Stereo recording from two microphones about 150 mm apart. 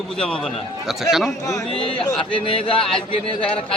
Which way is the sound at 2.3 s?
35° left (ahead or behind).